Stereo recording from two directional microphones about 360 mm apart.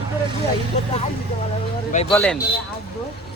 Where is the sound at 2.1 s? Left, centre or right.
Centre.